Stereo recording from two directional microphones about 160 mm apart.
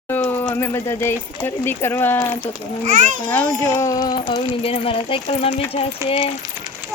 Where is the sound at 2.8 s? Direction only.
50° right (ahead or behind).